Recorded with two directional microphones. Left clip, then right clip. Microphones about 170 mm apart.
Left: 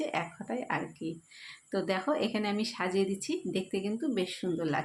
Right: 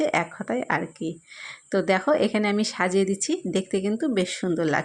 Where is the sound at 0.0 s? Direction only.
45° right (ahead or behind).